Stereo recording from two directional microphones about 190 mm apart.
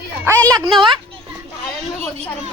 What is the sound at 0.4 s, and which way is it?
Speech, 20° right (ahead or behind).